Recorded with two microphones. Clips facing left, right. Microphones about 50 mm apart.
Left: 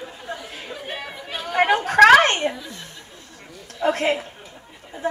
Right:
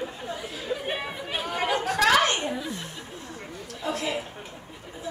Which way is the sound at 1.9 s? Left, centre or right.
Left.